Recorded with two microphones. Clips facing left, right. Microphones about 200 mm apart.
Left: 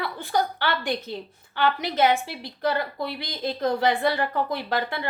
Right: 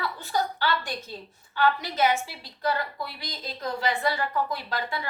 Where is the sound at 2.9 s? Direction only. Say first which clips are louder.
Left 6 dB; 60° left (ahead or behind).